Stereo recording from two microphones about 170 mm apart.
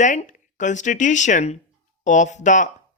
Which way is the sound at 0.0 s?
45° left (ahead or behind).